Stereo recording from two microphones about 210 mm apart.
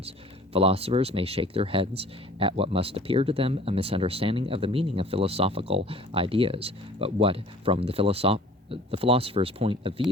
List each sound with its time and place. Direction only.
0.5 s speech: 30° right (ahead or behind)